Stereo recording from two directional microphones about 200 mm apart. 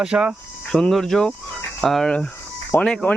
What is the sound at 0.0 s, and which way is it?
Speech, 5° right (ahead or behind).